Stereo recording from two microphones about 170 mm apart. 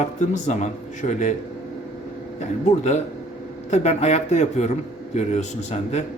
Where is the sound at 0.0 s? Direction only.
45° left (ahead or behind).